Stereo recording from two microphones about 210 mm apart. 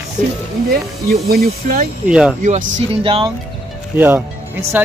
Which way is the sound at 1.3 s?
45° right (ahead or behind).